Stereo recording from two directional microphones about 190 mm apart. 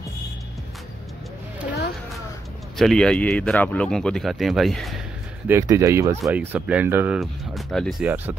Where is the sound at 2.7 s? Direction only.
5° left (ahead or behind).